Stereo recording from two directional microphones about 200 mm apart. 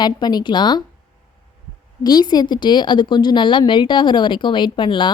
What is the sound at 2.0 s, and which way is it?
Speech, 20° left (ahead or behind).